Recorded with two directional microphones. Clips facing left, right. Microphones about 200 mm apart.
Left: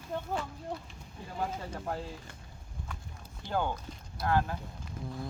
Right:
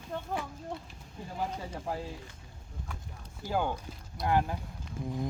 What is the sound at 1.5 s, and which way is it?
Speech, 5° right (ahead or behind).